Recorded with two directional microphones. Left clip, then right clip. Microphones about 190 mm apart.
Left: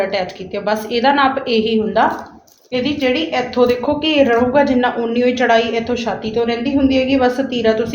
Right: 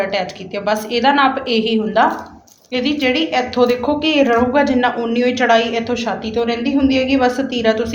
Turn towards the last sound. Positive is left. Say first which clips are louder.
# left 1 dB
turn(degrees=30)  # may be behind; listen again after turning